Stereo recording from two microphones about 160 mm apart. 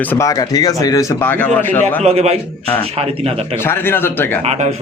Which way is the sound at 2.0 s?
40° right (ahead or behind).